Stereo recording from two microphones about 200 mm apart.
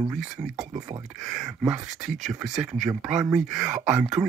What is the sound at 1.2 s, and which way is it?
Speech, centre (ahead or behind).